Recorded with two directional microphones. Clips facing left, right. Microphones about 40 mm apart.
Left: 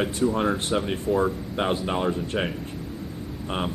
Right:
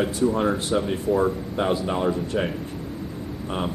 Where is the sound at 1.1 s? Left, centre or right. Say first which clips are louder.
Right 1 dB; centre.